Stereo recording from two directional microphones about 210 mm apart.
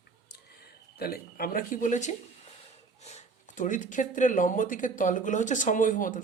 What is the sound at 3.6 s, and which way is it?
Speech, 40° left (ahead or behind).